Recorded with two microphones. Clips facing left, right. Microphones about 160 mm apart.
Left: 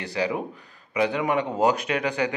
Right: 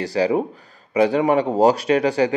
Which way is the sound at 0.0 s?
35° right (ahead or behind).